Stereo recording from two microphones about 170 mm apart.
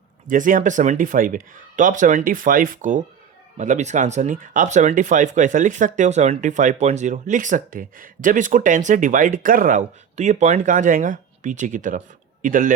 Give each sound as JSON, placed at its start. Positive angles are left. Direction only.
{"t": 0.3, "sound": "speech", "side_deg": -50}